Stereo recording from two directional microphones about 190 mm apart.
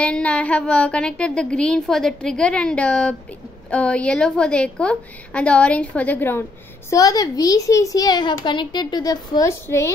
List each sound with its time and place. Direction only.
0.0 s a woman's voice: 5° left (ahead or behind)